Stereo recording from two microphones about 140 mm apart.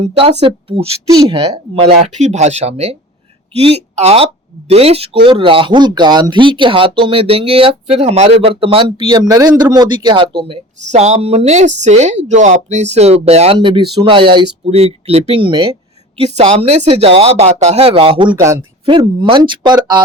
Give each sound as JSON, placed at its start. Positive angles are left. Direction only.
{"t": 0.0, "sound": "speech", "side_deg": -40}
{"t": 9.1, "sound": "speech", "side_deg": -25}
{"t": 14.7, "sound": "speech", "side_deg": -45}